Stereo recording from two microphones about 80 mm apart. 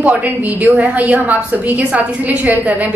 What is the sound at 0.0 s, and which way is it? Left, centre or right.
A woman's voice, centre.